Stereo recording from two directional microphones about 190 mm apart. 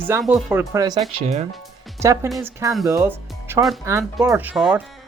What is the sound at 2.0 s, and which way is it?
Speech, 15° right (ahead or behind).